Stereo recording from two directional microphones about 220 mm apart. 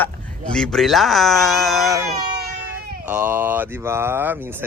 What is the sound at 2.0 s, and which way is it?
Baby cry, 40° right (ahead or behind).